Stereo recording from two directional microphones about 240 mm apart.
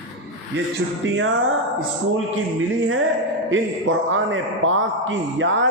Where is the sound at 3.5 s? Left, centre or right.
Right.